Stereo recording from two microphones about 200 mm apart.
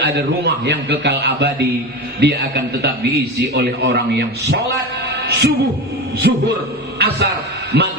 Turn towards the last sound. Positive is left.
turn(degrees=-55)  # may be behind; listen again after turning